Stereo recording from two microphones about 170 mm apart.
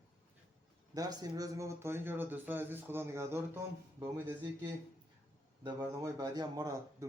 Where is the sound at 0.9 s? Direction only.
20° right (ahead or behind).